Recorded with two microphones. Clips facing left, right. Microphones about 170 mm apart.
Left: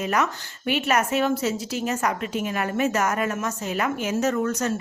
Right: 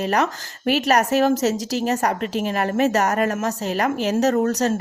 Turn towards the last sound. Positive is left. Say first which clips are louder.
# right 5 dB
turn(degrees=-35)  # may be behind; listen again after turning